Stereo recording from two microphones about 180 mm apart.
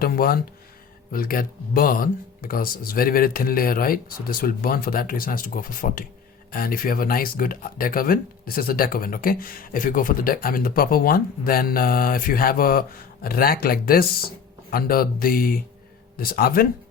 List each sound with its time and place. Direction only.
0.0 s speech: 55° left (ahead or behind)